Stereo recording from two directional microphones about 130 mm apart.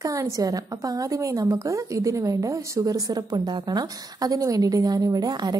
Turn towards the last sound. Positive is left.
turn(degrees=-30)  # may be behind; listen again after turning